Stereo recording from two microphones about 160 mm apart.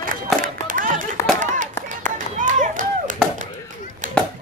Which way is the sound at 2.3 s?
55° right (ahead or behind).